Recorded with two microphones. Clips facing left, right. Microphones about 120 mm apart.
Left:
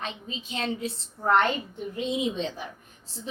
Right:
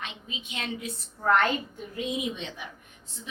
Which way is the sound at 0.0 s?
35° left (ahead or behind).